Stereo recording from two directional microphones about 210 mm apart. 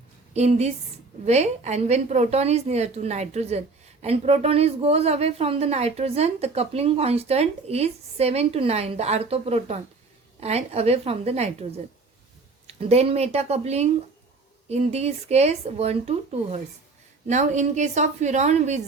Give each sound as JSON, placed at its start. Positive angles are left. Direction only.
{"t": 0.3, "sound": "a woman's voice", "side_deg": -30}
{"t": 12.6, "sound": "a woman's voice", "side_deg": -30}